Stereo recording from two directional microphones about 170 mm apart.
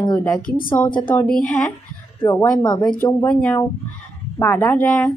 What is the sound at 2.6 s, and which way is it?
Speech, 25° left (ahead or behind).